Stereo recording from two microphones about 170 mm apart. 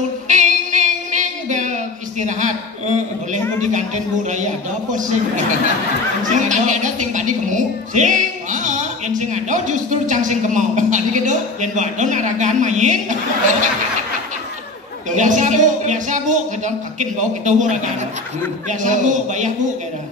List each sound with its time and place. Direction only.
0.3 s a sound: 45° right (ahead or behind)
3.7 s a woman's voice: 45° right (ahead or behind)
15.0 s a woman's voice: 45° right (ahead or behind)